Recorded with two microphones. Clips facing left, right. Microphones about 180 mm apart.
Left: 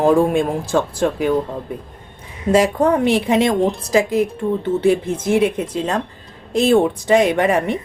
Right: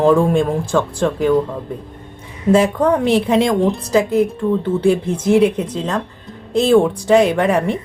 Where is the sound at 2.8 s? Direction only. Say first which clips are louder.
Right 1 dB; 5° left (ahead or behind).